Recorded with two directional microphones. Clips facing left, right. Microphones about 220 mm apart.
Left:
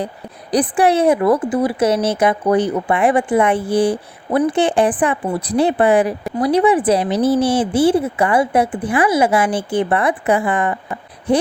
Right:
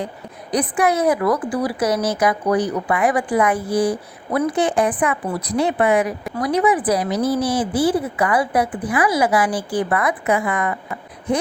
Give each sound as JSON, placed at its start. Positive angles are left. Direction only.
{"t": 0.5, "sound": "a woman's voice", "side_deg": 30}